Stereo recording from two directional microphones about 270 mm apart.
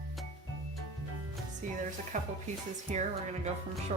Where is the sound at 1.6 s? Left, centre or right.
Right.